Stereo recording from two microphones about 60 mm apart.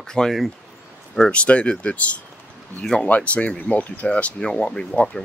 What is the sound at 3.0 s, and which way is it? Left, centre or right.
Speech, left.